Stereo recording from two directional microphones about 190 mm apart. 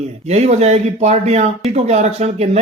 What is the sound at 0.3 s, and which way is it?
A man's voice, 35° right (ahead or behind).